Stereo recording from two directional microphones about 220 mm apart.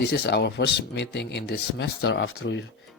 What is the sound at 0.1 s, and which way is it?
Speech, 50° left (ahead or behind).